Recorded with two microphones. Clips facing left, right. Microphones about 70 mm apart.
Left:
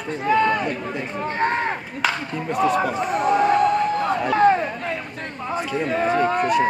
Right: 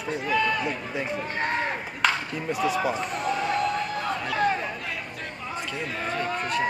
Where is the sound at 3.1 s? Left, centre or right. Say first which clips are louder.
Left 9 dB; left.